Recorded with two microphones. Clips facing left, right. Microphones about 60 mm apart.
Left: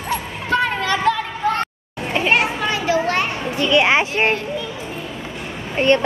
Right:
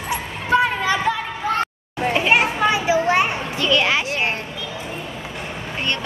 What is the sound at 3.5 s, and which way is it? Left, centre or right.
Children playing, left.